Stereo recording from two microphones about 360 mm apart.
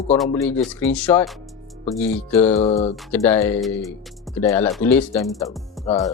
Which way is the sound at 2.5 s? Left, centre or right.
Centre.